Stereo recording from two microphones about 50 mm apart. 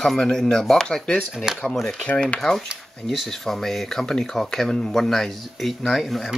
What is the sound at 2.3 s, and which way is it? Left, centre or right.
Speech, centre.